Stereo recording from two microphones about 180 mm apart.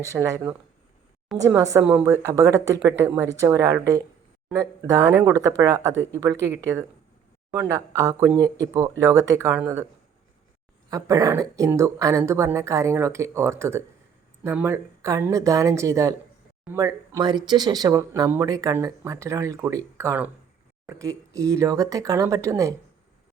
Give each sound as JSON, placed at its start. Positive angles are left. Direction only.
{"t": 0.0, "sound": "speech", "side_deg": -15}
{"t": 1.8, "sound": "a woman's voice", "side_deg": -5}
{"t": 2.0, "sound": "speech", "side_deg": -15}
{"t": 10.8, "sound": "speech", "side_deg": -20}